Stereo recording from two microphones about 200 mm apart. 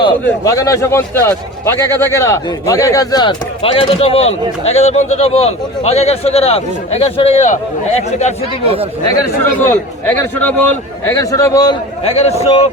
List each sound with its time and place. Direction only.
0.3 s a man's voice: 15° left (ahead or behind); by 7.6 s 35° left (ahead or behind)
9.0 s a man's voice: 10° left (ahead or behind)
12.0 s a man's voice: 30° left (ahead or behind)